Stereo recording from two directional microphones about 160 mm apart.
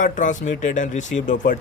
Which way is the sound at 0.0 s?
50° left (ahead or behind).